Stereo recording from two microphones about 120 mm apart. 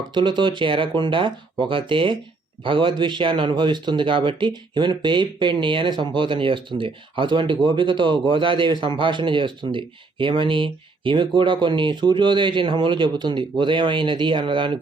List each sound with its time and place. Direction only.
0.1 s a man's voice: 40° right (ahead or behind)